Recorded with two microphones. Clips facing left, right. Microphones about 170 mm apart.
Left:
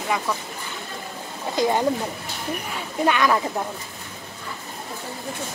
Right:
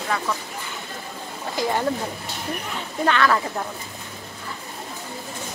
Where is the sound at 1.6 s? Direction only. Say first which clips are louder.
Left 3 dB; 20° left (ahead or behind).